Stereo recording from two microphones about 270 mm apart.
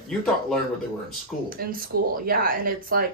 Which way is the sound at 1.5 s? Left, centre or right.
Right.